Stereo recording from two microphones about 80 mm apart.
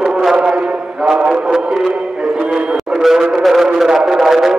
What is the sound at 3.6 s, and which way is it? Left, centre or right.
Speech, centre.